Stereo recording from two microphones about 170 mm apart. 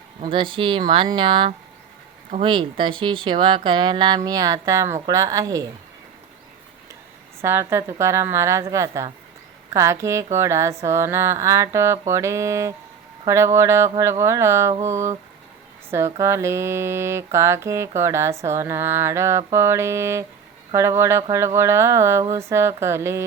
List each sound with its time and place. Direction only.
0.2 s speech: 30° right (ahead or behind)
7.4 s mantra: 15° right (ahead or behind)